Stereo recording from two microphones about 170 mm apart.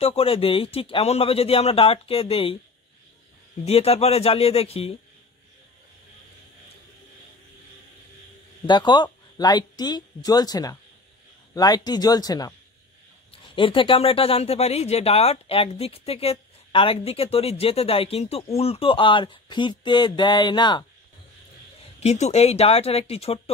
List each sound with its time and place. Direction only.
0.0 s speech: 35° left (ahead or behind)
3.6 s speech: 35° left (ahead or behind)
8.6 s speech: 25° left (ahead or behind)
22.0 s speech: 40° left (ahead or behind)